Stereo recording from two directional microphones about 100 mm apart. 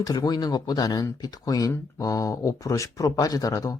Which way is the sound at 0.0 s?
40° left (ahead or behind).